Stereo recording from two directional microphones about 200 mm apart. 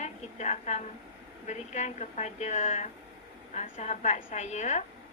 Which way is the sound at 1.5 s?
35° left (ahead or behind).